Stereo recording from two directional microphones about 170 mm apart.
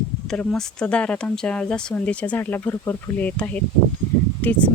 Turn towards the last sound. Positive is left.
turn(degrees=10)  # may be behind; listen again after turning